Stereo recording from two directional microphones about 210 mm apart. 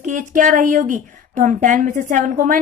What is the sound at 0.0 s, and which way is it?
A woman's voice, 35° right (ahead or behind).